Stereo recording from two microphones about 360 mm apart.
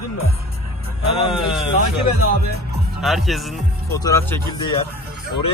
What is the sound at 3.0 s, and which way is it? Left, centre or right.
Speech, centre.